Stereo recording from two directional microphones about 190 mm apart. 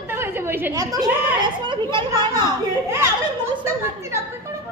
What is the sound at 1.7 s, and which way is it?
Speech, 25° right (ahead or behind).